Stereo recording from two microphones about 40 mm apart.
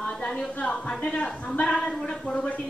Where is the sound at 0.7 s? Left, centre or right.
Left.